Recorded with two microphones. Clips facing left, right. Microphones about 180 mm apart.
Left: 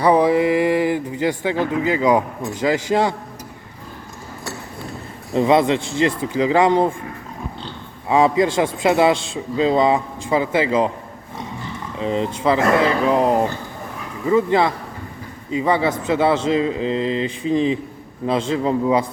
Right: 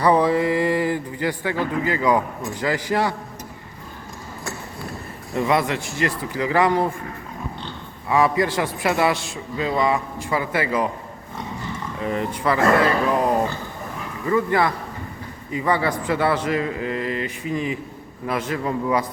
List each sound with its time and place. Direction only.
0.0 s a sound: 15° left (ahead or behind)
2.5 s a man's voice: 20° left (ahead or behind)
5.3 s a man's voice: 25° left (ahead or behind)
8.0 s a man's voice: 25° left (ahead or behind)
11.9 s a man's voice: 20° left (ahead or behind)